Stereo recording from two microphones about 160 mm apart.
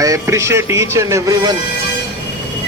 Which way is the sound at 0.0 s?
20° right (ahead or behind).